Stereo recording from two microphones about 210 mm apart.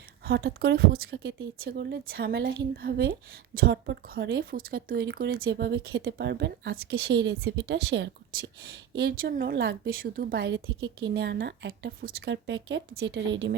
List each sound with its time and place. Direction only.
0.3 s a woman's voice: 50° right (ahead or behind)